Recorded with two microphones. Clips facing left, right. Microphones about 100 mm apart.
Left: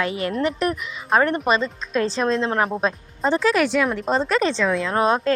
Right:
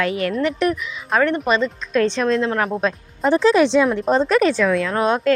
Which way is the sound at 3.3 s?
25° right (ahead or behind).